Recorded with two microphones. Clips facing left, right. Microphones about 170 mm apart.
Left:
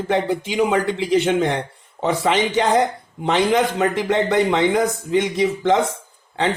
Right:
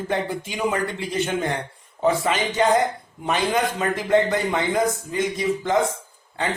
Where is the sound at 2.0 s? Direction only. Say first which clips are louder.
Left 2 dB; 90° left.